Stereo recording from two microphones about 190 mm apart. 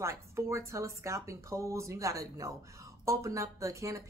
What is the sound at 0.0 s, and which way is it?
Speech, 15° right (ahead or behind).